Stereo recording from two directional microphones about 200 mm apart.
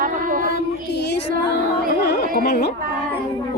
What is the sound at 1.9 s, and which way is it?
Carnatic music, 50° left (ahead or behind).